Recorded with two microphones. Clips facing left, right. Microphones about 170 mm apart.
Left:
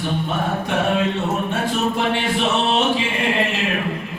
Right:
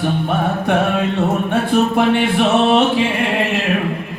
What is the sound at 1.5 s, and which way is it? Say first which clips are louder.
Music: right 6 dB; 60° right (ahead or behind).